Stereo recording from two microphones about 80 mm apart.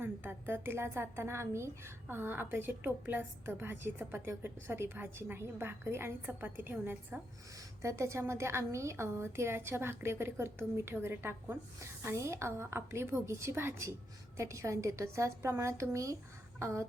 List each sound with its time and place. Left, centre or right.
0.0 s a woman's voice: right
7.8 s a woman's voice: right